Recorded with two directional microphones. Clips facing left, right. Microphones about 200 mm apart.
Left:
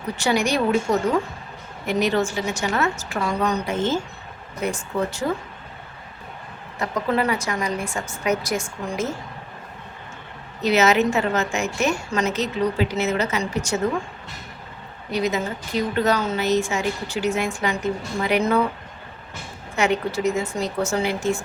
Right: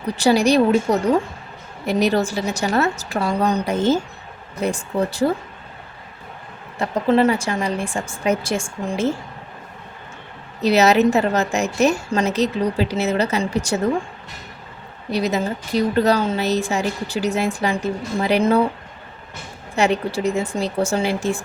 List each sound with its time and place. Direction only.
0.2 s a woman's voice: 35° right (ahead or behind)
6.7 s a woman's voice: 30° right (ahead or behind)
10.6 s a woman's voice: 35° right (ahead or behind)
15.1 s a woman's voice: 35° right (ahead or behind)
19.7 s a woman's voice: 35° right (ahead or behind)